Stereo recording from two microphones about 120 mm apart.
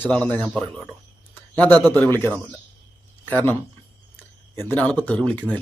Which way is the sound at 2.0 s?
20° left (ahead or behind).